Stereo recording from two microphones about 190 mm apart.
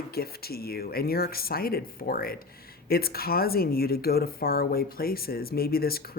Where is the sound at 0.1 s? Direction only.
55° left (ahead or behind).